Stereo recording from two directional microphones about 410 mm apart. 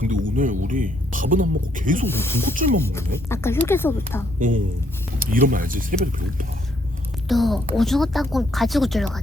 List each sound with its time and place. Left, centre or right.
0.0 s speech: centre
2.0 s speech: centre
4.4 s speech: centre
7.3 s speech: centre